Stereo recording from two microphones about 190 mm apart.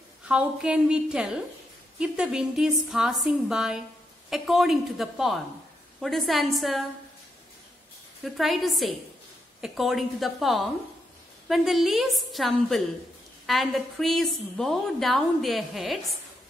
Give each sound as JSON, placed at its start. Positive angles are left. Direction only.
{"t": 0.3, "sound": "a woman's voice", "side_deg": -5}
{"t": 8.2, "sound": "a woman's voice", "side_deg": 0}